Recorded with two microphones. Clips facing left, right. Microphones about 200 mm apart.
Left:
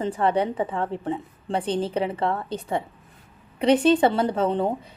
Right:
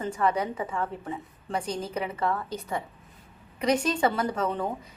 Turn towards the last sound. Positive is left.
turn(degrees=30)  # may be behind; listen again after turning